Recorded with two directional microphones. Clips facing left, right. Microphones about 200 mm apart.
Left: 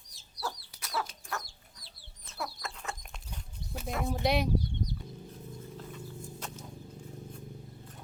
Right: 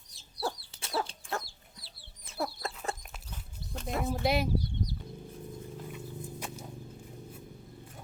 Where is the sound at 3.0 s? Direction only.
5° right (ahead or behind).